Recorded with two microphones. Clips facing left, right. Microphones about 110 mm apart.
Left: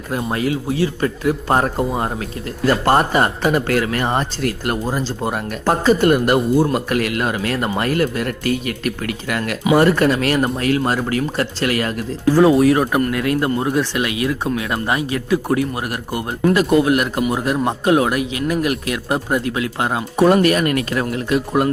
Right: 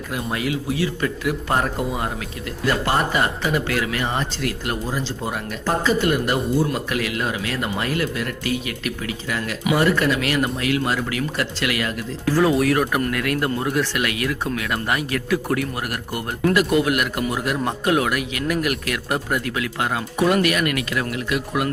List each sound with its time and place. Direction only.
0.1 s speech: 35° left (ahead or behind)
2.6 s speech: 45° left (ahead or behind)
9.7 s speech: 45° left (ahead or behind)
12.2 s a man's voice: 25° left (ahead or behind)